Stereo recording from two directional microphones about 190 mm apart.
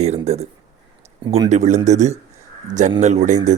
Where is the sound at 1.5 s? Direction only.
40° right (ahead or behind).